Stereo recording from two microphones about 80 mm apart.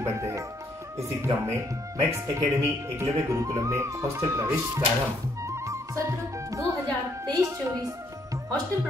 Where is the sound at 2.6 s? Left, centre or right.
Right.